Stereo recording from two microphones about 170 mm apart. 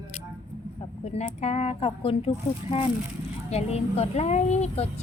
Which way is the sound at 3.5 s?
40° left (ahead or behind).